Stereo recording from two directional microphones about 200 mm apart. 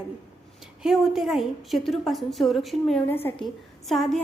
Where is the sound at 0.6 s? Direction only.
Centre (ahead or behind).